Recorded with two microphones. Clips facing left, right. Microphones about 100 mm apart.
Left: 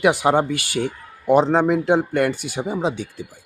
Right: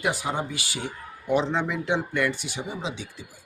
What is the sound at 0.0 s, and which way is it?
A man's voice, 70° left (ahead or behind).